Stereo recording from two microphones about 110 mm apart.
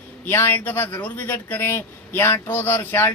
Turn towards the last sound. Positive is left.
turn(degrees=20)  # may be behind; listen again after turning